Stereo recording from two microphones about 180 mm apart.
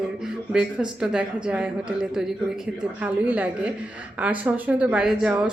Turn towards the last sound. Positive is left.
turn(degrees=-5)  # may be behind; listen again after turning